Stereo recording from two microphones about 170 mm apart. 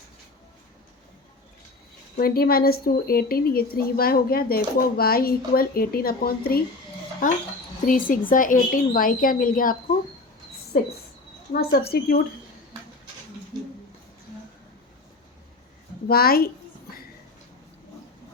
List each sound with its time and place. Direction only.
2.1 s speech: 60° left (ahead or behind)
11.9 s speech: 65° left (ahead or behind)
16.0 s speech: 65° left (ahead or behind)